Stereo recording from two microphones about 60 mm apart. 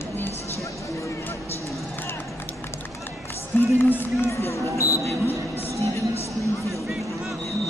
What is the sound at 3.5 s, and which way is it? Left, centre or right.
Speech, left.